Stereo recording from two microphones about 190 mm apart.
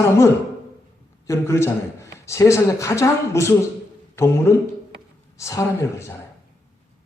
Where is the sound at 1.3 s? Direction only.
15° left (ahead or behind).